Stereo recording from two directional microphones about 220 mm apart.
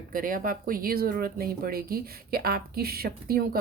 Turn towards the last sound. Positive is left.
turn(degrees=-45)  # may be behind; listen again after turning